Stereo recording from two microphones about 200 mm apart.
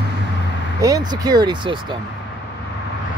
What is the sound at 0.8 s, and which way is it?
Speech, 20° right (ahead or behind).